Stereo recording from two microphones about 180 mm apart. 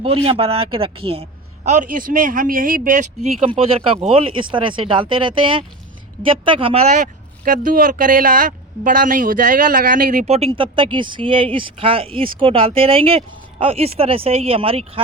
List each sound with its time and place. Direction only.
0.0 s speech: 30° right (ahead or behind)
1.6 s a woman's voice: 45° right (ahead or behind)
3.5 s speech: 30° right (ahead or behind)